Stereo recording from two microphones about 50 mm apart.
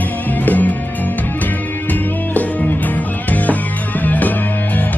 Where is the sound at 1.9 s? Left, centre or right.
Left.